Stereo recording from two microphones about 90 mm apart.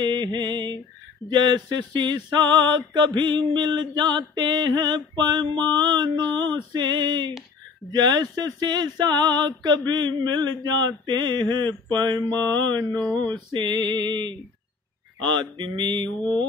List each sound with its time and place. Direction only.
0.0 s mantra: 60° right (ahead or behind)
7.9 s a sound: 50° right (ahead or behind)
13.0 s mantra: 15° left (ahead or behind)
13.5 s mantra: 60° right (ahead or behind)